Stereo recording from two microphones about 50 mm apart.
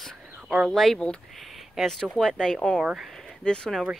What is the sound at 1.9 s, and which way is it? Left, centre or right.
Speech, centre.